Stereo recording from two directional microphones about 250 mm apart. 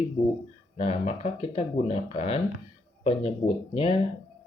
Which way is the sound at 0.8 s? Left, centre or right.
Left.